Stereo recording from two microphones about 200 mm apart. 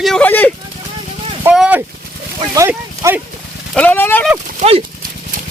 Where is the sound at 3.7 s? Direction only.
5° left (ahead or behind).